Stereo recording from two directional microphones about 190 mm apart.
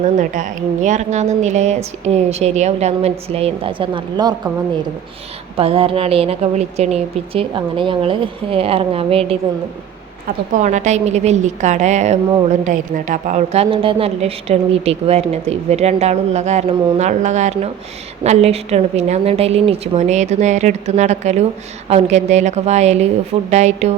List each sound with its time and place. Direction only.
0.0 s a woman's voice: 40° right (ahead or behind); by 4.4 s 25° right (ahead or behind)
5.5 s a woman's voice: 30° right (ahead or behind)
10.5 s a woman's voice: 40° right (ahead or behind)